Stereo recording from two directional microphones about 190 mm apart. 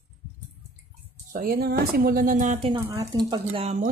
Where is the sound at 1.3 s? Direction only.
50° right (ahead or behind).